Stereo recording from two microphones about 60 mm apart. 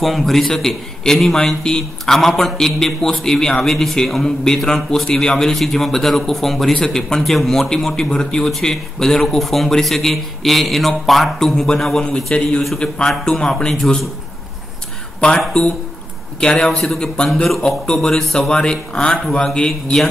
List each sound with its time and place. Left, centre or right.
0.0 s a man's voice: centre
15.1 s a man's voice: centre
18.5 s a man's voice: centre